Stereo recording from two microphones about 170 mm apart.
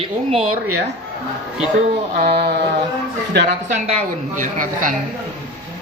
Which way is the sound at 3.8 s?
45° right (ahead or behind).